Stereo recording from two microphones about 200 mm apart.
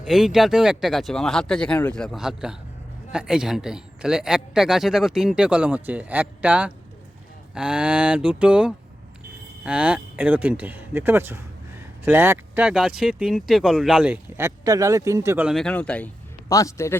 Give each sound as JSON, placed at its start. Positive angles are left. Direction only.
{"t": 0.0, "sound": "a man's voice", "side_deg": 0}
{"t": 15.4, "sound": "a man's voice", "side_deg": 5}